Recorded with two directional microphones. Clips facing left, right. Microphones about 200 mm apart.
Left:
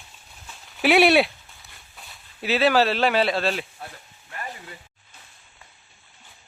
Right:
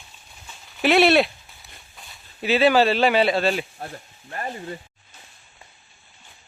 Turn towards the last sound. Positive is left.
turn(degrees=-40)  # may be behind; listen again after turning